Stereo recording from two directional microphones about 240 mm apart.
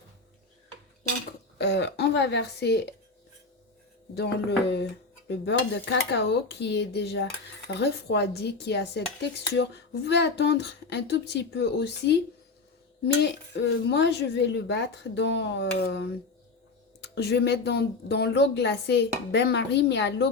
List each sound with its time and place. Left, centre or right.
1.5 s speech: left
4.1 s speech: left
13.2 s speech: left